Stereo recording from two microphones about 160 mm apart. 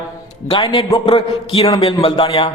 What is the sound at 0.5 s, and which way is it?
Speech, 30° left (ahead or behind).